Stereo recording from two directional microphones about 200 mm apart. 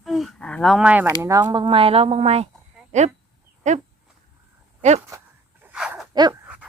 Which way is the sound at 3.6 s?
35° right (ahead or behind).